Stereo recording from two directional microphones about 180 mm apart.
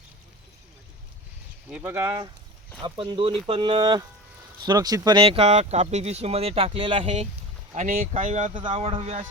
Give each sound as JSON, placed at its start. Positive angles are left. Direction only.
{"t": 1.7, "sound": "speech", "side_deg": -10}
{"t": 2.8, "sound": "speech", "side_deg": -25}
{"t": 7.8, "sound": "speech", "side_deg": -50}
{"t": 8.5, "sound": "speech", "side_deg": -30}